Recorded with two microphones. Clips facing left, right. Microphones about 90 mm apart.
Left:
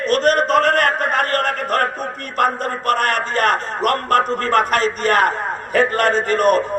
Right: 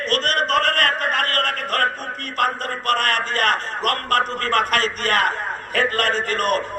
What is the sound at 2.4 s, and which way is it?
A man's voice, 25° left (ahead or behind).